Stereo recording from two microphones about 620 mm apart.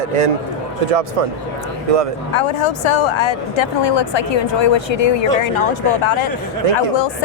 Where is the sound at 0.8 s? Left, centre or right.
Right.